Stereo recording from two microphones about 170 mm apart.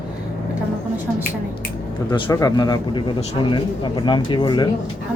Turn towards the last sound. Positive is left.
turn(degrees=25)  # may be behind; listen again after turning